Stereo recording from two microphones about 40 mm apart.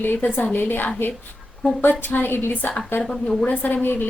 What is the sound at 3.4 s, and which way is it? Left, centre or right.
Speech, left.